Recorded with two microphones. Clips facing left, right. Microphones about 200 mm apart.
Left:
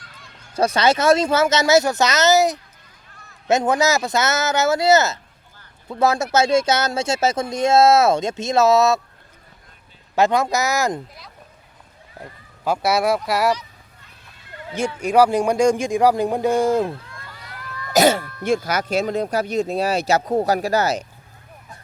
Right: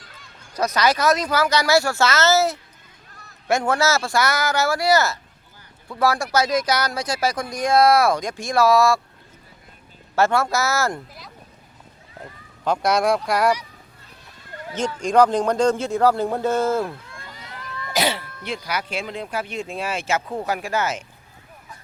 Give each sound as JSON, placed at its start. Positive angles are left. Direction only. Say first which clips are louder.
{"t": 0.5, "sound": "speech", "louder": "left 3 dB", "side_deg": 30}
{"t": 10.2, "sound": "speech", "louder": "left 2 dB", "side_deg": 15}
{"t": 12.6, "sound": "speech", "louder": "even", "side_deg": 5}
{"t": 14.7, "sound": "speech", "louder": "left 1 dB", "side_deg": 10}
{"t": 17.2, "sound": "a sound", "louder": "right 3 dB", "side_deg": -20}
{"t": 17.9, "sound": "speech", "louder": "left 8 dB", "side_deg": 45}